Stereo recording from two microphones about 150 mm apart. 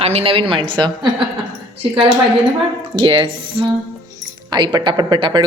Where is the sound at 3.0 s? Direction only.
35° right (ahead or behind).